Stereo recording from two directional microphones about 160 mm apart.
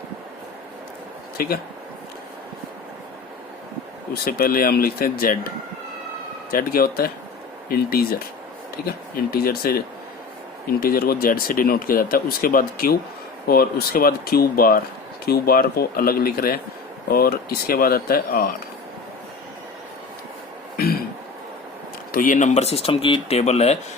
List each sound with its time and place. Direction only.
1.4 s speech: 65° left (ahead or behind)
4.1 s speech: 65° left (ahead or behind)
6.5 s speech: 65° left (ahead or behind)
9.3 s speech: 70° left (ahead or behind)
20.7 s throat clearing: 70° left (ahead or behind)
22.1 s speech: 55° left (ahead or behind)